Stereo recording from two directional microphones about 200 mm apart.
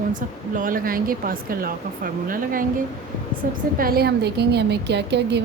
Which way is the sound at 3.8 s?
50° right (ahead or behind).